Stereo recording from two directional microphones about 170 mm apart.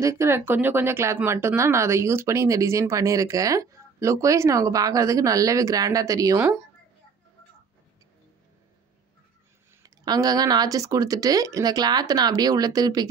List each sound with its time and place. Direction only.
0.0 s speech: 15° right (ahead or behind)
9.8 s speech: 25° right (ahead or behind)